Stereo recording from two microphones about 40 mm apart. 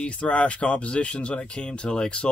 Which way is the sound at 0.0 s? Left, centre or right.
Left.